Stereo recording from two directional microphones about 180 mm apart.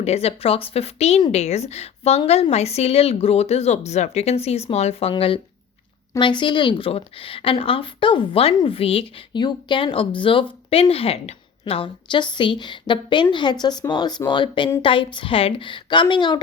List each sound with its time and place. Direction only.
0.0 s a woman's voice: 35° left (ahead or behind)